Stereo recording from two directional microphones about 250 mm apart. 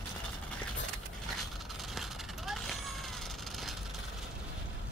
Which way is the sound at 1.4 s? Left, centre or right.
Centre.